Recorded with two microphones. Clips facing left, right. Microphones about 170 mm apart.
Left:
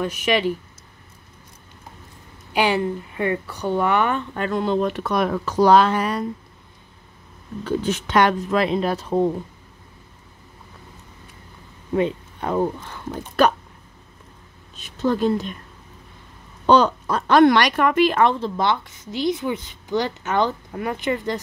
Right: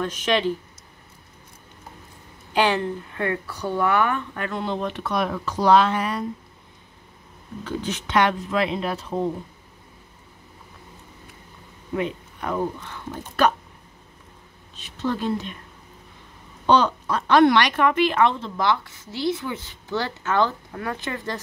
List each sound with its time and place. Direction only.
0.0 s a woman's voice: 10° left (ahead or behind)
2.5 s speech: 10° left (ahead or behind); by 6.2 s 40° left (ahead or behind)
7.6 s speech: 45° left (ahead or behind)
11.9 s speech: 30° left (ahead or behind)
14.8 s speech: 45° left (ahead or behind)
16.6 s speech: 45° left (ahead or behind)
18.6 s a woman's voice: 20° left (ahead or behind)